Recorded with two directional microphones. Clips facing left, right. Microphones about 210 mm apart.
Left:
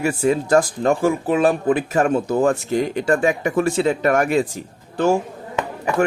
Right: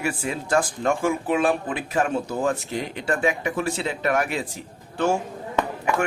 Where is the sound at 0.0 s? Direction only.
40° left (ahead or behind).